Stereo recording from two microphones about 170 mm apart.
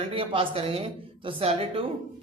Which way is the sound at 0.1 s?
30° right (ahead or behind).